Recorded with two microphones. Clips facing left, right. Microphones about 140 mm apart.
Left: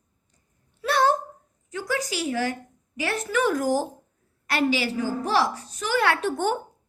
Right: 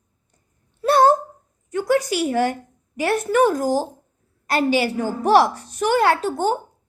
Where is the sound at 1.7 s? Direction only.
55° right (ahead or behind).